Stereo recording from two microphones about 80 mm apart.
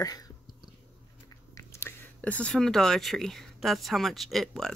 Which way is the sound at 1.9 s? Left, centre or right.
Left.